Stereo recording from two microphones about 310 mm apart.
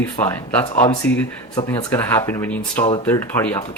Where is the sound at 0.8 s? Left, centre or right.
Left.